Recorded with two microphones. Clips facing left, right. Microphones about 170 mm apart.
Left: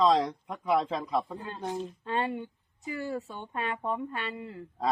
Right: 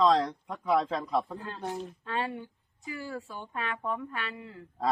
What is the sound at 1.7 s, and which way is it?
Speech, 20° left (ahead or behind).